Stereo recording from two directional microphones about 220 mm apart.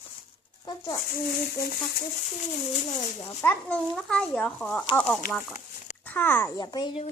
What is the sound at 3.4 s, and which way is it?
A child's voice, 10° left (ahead or behind).